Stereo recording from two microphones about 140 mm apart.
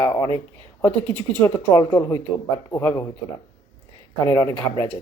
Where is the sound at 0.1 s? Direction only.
30° left (ahead or behind).